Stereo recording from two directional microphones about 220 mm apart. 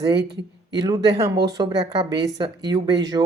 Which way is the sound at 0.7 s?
15° right (ahead or behind).